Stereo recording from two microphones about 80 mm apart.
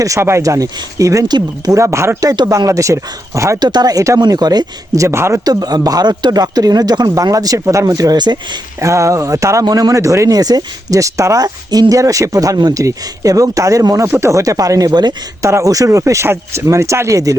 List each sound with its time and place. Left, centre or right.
0.0 s speech: right
1.3 s speech: right
1.8 s speech: right
3.6 s speech: right
4.9 s speech: right
5.5 s speech: right
8.8 s speech: right
9.9 s speech: right
15.4 s speech: right